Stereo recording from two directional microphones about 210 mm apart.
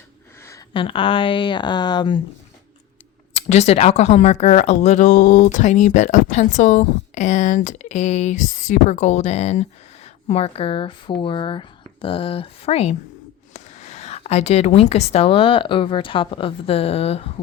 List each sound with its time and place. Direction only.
0.4 s speech: 20° left (ahead or behind)
3.3 s a woman's voice: 30° left (ahead or behind)